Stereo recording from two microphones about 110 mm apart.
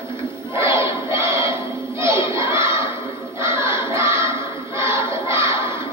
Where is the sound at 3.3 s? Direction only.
25° right (ahead or behind).